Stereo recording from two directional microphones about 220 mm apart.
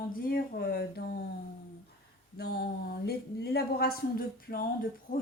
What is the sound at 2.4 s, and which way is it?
Speech, 45° left (ahead or behind).